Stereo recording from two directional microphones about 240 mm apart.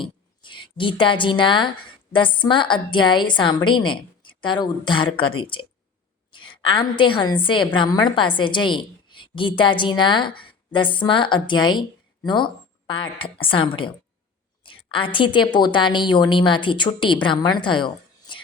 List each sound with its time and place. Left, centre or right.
0.0 s a woman's voice: centre